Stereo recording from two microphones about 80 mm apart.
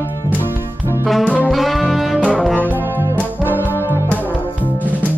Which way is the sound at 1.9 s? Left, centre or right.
Centre.